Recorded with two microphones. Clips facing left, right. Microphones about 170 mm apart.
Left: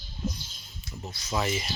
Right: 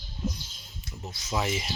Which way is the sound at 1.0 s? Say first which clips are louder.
Even; 10° right (ahead or behind).